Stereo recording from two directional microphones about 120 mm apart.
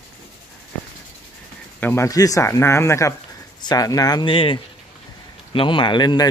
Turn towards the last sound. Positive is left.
turn(degrees=40)  # may be behind; listen again after turning